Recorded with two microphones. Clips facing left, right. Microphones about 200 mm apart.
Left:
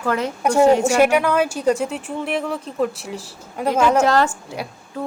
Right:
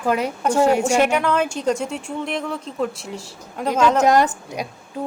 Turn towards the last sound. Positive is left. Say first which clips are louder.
# right 1 dB
turn(degrees=-15)  # may be behind; listen again after turning